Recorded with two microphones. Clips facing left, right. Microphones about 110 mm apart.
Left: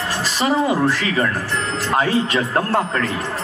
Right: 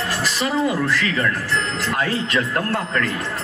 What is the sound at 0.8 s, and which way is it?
Speech, 30° left (ahead or behind).